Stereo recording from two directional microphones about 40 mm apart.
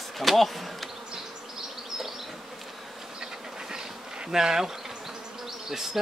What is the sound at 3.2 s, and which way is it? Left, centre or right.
Bee, centre.